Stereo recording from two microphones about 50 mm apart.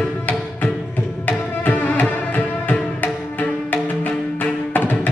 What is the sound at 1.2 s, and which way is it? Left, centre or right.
Tabla, left.